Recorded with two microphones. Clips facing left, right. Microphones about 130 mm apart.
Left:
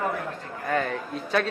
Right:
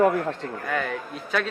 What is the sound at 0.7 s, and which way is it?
Speech, 35° left (ahead or behind).